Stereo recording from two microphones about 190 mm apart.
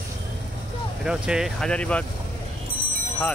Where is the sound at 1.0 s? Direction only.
5° right (ahead or behind).